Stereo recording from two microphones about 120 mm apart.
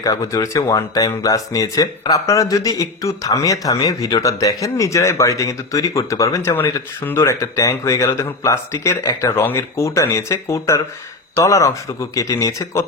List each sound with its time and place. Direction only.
0.0 s speech: 30° left (ahead or behind)
7.0 s speech: 20° left (ahead or behind)